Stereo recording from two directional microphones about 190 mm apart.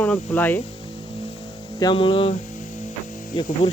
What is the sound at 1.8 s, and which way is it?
Music, 25° left (ahead or behind).